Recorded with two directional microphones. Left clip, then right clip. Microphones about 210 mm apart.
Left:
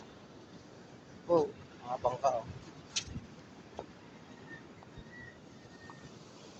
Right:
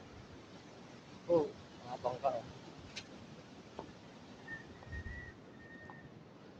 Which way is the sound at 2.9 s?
20° left (ahead or behind).